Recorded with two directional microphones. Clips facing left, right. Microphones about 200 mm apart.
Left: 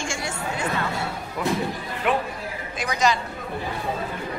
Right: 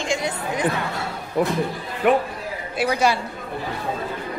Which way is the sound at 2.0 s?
50° right (ahead or behind).